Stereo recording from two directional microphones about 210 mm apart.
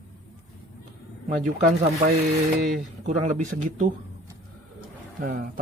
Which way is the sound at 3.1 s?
35° right (ahead or behind).